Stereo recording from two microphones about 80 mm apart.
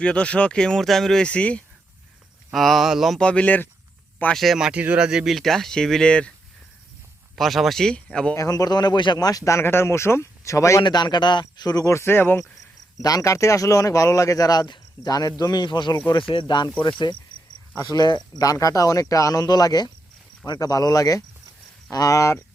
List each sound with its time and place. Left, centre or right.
0.0 s speech: centre
2.5 s speech: centre
3.2 s speech: centre
4.4 s speech: centre
7.3 s speech: centre
8.4 s a man's voice: left
9.1 s speech: left
10.8 s speech: left
11.9 s speech: left
13.0 s speech: left
16.0 s speech: left
17.9 s a man's voice: left
18.4 s speech: left